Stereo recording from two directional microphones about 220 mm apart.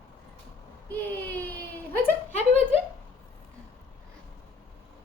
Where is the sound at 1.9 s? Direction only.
10° left (ahead or behind).